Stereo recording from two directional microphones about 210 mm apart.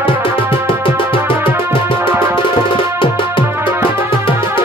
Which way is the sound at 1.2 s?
10° right (ahead or behind).